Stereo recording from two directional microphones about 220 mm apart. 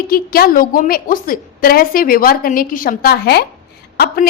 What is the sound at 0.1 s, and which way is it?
A woman's voice, 40° left (ahead or behind).